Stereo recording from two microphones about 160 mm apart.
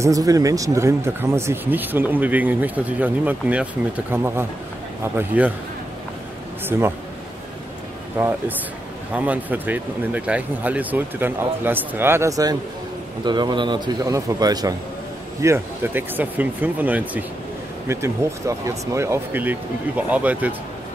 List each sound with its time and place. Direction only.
0.0 s speech: 20° right (ahead or behind)
6.7 s speech: 15° right (ahead or behind)
8.2 s a man's voice: 10° right (ahead or behind)